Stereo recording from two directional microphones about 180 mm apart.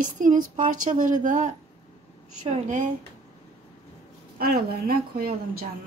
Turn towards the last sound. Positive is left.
turn(degrees=-55)  # may be behind; listen again after turning